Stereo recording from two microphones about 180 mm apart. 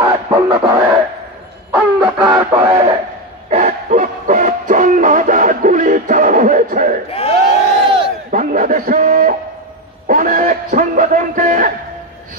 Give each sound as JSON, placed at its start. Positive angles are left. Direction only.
{"t": 0.0, "sound": "a sound", "side_deg": -30}
{"t": 0.6, "sound": "music", "side_deg": -20}
{"t": 1.8, "sound": "music", "side_deg": -5}
{"t": 2.1, "sound": "music", "side_deg": -25}
{"t": 3.4, "sound": "music", "side_deg": -45}
{"t": 7.1, "sound": "crowd", "side_deg": 35}
{"t": 8.3, "sound": "a sound", "side_deg": -50}
{"t": 10.0, "sound": "music", "side_deg": -50}